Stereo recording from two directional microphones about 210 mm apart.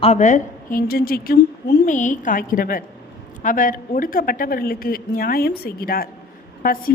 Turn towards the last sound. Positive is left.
turn(degrees=40)  # may be behind; listen again after turning